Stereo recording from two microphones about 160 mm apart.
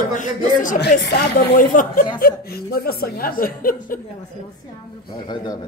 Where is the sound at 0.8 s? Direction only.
90° left.